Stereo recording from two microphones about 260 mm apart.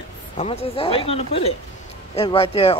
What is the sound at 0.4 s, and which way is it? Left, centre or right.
Speech, left.